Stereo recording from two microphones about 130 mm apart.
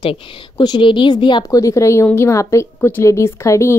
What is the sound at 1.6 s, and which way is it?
A woman's voice, 25° left (ahead or behind).